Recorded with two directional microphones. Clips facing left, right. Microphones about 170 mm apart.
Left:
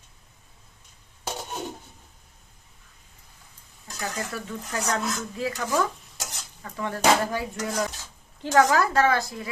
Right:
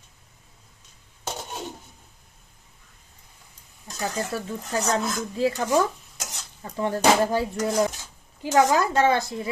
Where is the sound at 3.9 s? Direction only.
30° right (ahead or behind).